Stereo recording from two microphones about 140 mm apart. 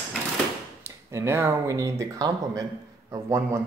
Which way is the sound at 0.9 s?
20° right (ahead or behind).